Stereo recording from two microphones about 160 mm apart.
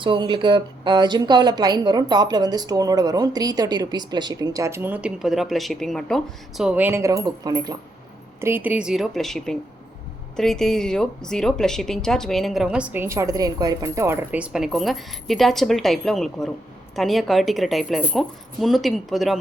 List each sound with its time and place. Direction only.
0.0 s a woman's voice: 30° right (ahead or behind)
8.4 s speech: 15° right (ahead or behind)